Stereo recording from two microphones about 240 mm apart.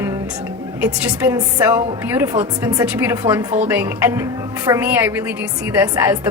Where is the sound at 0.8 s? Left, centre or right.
Centre.